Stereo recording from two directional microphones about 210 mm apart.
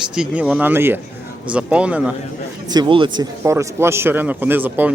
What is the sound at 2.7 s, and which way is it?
Speech, 20° right (ahead or behind).